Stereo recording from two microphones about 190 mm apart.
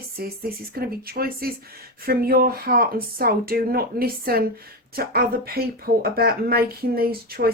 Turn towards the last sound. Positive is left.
turn(degrees=-50)  # may be behind; listen again after turning